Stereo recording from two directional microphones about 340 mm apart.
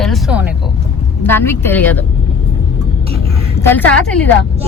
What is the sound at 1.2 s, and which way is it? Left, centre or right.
Speech, centre.